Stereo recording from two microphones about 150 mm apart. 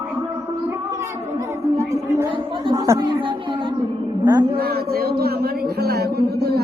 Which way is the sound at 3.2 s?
35° right (ahead or behind).